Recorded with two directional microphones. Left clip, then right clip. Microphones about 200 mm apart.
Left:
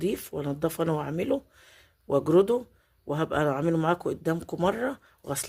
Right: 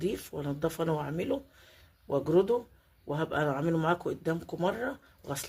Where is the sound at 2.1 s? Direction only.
40° left (ahead or behind).